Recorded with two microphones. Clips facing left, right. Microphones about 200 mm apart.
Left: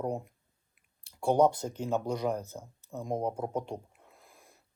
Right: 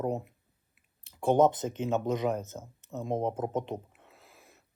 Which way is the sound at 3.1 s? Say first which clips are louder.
Right 2 dB; 25° right (ahead or behind).